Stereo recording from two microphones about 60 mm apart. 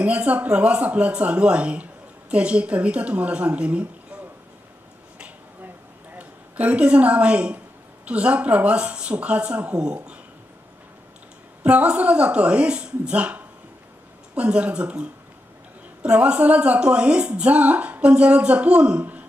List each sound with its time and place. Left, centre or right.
0.0 s speech: right
6.1 s a woman's voice: right
11.6 s speech: right